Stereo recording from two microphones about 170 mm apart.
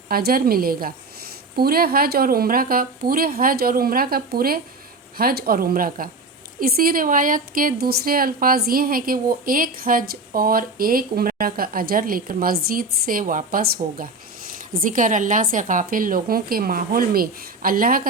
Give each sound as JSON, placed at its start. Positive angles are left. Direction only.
{"t": 0.1, "sound": "a woman's voice", "side_deg": -65}